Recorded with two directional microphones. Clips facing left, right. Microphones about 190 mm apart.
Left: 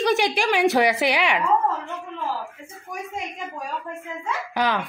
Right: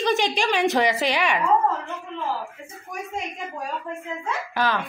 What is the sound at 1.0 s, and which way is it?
Speech, 15° left (ahead or behind).